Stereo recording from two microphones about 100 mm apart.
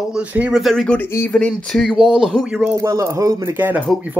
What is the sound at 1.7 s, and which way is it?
Speech, centre (ahead or behind).